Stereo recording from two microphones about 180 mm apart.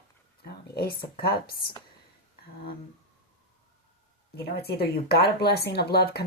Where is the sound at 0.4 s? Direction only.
60° left (ahead or behind).